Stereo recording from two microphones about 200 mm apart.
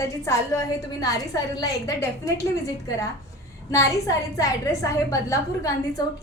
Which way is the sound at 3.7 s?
15° left (ahead or behind).